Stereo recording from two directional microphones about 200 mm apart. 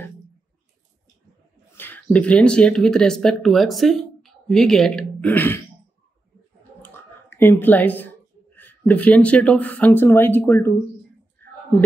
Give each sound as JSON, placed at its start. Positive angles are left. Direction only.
{"t": 1.8, "sound": "speech", "side_deg": 10}
{"t": 6.8, "sound": "a sound", "side_deg": 10}
{"t": 8.5, "sound": "speech", "side_deg": 10}